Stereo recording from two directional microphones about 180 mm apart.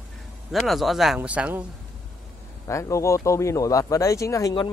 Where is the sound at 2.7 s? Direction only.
15° left (ahead or behind).